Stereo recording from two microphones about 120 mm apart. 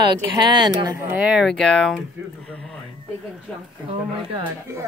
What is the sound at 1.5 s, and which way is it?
Speech, 5° left (ahead or behind).